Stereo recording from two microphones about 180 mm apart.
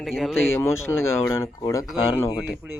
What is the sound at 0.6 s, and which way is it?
Speech, 15° left (ahead or behind).